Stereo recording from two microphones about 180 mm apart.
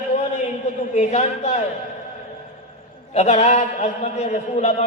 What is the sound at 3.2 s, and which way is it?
A man's voice, 40° left (ahead or behind).